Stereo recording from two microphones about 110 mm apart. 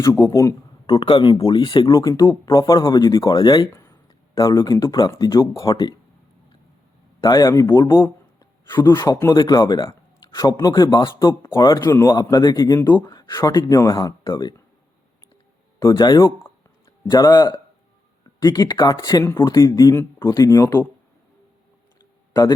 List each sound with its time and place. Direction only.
0.2 s speech: 30° left (ahead or behind)
7.2 s a man's voice: 35° left (ahead or behind)
15.8 s speech: 35° left (ahead or behind)
19.2 s speech: 20° left (ahead or behind)
19.5 s speech: 35° left (ahead or behind)
22.3 s a sound: 35° left (ahead or behind)